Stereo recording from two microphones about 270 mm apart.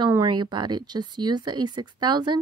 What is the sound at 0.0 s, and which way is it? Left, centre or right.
Speech, centre.